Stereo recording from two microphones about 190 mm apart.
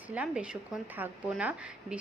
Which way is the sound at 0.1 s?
5° right (ahead or behind).